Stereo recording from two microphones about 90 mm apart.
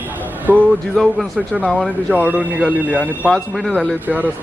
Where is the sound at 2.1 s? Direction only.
15° right (ahead or behind).